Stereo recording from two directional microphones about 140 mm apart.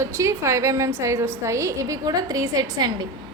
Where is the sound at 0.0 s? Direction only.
20° right (ahead or behind).